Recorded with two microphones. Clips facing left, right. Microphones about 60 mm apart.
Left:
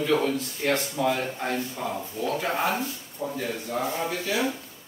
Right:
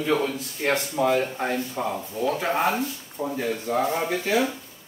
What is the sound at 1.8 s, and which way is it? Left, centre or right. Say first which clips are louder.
Speech: right 3 dB; right.